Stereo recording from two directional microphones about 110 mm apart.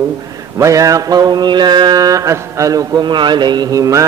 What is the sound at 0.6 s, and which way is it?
Mantra, 30° right (ahead or behind).